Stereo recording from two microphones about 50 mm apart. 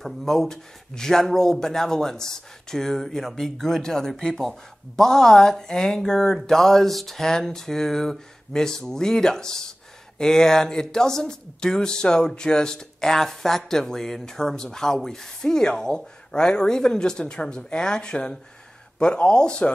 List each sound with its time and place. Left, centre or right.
0.0 s speech: centre